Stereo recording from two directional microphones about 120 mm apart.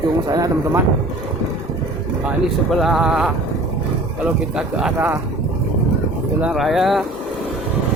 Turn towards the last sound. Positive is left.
turn(degrees=0)  # may be behind; listen again after turning